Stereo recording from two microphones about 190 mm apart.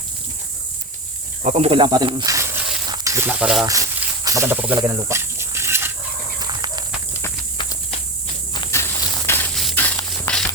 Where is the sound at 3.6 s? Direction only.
15° right (ahead or behind).